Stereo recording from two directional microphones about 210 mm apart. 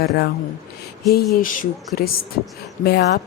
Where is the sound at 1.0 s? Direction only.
50° left (ahead or behind).